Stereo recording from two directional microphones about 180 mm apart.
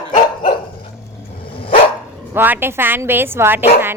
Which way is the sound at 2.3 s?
10° right (ahead or behind).